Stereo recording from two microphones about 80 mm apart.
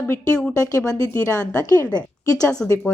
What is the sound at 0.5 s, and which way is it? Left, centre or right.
Speech, left.